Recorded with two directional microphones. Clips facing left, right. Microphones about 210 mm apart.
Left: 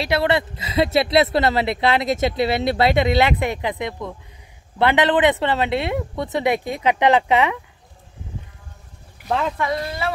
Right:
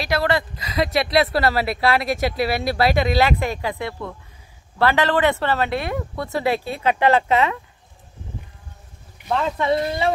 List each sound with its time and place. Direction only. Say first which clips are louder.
0.0 s speech: left 2 dB; 25° left (ahead or behind)
9.6 s speech: right 4 dB; 25° right (ahead or behind)